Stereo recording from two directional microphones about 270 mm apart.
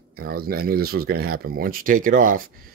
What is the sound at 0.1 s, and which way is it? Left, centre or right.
Speech, right.